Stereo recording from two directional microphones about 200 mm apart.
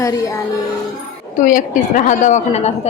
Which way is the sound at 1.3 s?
40° left (ahead or behind).